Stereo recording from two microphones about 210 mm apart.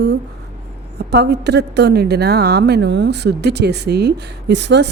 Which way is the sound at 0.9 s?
50° right (ahead or behind).